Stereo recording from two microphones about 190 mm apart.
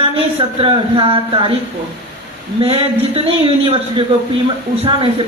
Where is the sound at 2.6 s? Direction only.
30° right (ahead or behind).